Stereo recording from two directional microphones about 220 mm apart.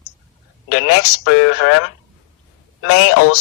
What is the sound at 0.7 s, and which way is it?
Speech, 80° left.